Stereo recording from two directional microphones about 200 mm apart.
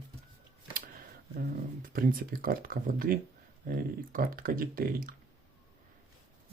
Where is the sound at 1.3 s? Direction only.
45° right (ahead or behind).